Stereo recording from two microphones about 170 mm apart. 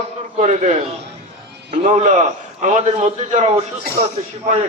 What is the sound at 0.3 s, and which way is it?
A man's voice, 45° right (ahead or behind).